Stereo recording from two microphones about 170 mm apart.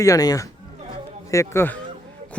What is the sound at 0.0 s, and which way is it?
Speech, 20° left (ahead or behind).